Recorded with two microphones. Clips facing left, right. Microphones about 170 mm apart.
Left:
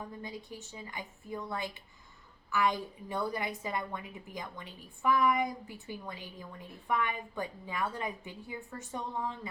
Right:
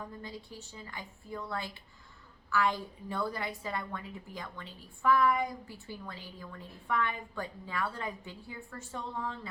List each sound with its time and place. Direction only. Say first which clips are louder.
0.2 s a woman's voice: left 2 dB; 15° left (ahead or behind)